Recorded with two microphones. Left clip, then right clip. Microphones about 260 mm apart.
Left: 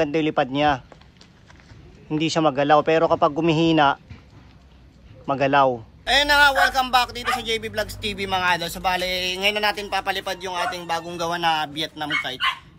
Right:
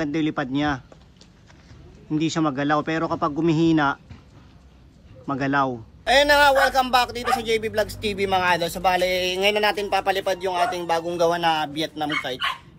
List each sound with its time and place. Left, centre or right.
0.0 s a man's voice: centre
2.1 s a man's voice: centre
5.4 s a man's voice: centre